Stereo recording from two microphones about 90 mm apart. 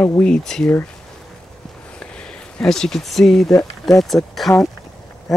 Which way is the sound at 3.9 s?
Centre (ahead or behind).